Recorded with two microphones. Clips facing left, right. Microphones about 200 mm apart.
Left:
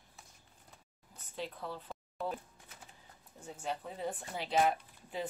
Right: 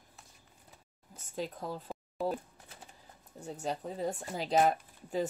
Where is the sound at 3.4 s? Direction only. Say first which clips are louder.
Right 4 dB; 40° right (ahead or behind).